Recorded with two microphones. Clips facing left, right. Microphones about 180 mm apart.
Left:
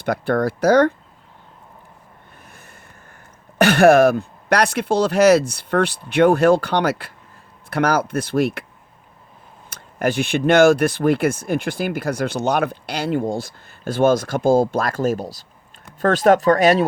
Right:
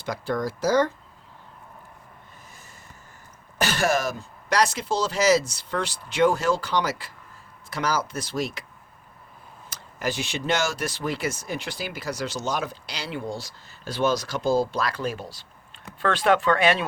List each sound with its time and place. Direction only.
0.0 s speech: 60° left (ahead or behind)
2.4 s snort: 60° left (ahead or behind)
3.6 s speech: 60° left (ahead or behind)
9.6 s speech: 55° left (ahead or behind); by 16.8 s 40° left (ahead or behind)